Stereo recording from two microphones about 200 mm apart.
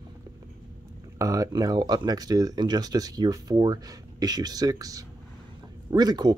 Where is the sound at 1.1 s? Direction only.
15° right (ahead or behind).